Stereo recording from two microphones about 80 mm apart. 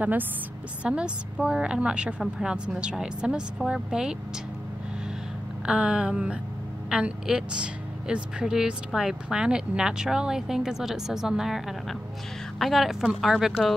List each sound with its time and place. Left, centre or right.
0.0 s a woman's voice: right
0.8 s a woman's voice: centre
5.7 s a woman's voice: centre